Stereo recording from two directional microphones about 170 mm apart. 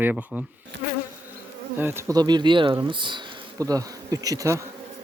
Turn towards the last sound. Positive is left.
turn(degrees=-20)  # may be behind; listen again after turning